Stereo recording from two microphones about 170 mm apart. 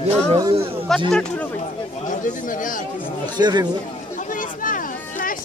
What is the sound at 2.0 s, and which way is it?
Speech, 50° left (ahead or behind).